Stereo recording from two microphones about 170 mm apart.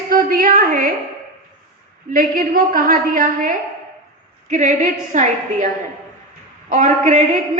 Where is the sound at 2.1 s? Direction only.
55° right (ahead or behind).